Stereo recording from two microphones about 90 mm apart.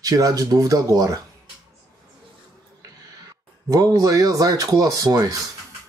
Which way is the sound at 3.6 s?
40° right (ahead or behind).